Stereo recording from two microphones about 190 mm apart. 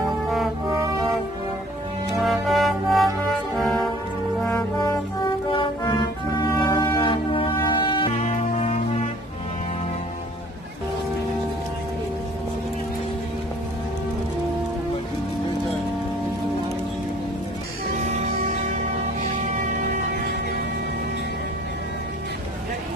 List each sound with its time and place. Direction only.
2.1 s music: centre (ahead or behind)
3.5 s brass instrument: centre (ahead or behind)
4.7 s music: 25° left (ahead or behind)
20.1 s music: 55° right (ahead or behind)